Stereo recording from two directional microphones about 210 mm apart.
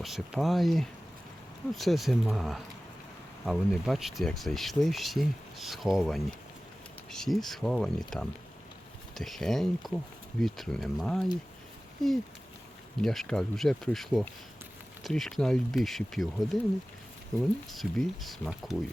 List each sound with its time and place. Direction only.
0.0 s speech: centre (ahead or behind)
13.0 s speech: centre (ahead or behind)
17.7 s speech: centre (ahead or behind)